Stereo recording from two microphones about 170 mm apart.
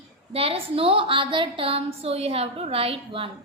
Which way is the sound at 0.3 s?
35° right (ahead or behind).